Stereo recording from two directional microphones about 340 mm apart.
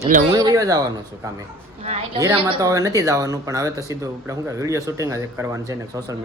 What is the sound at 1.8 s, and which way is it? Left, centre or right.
Speech, centre.